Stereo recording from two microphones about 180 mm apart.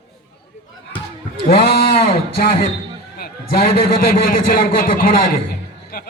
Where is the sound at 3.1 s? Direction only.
55° left (ahead or behind).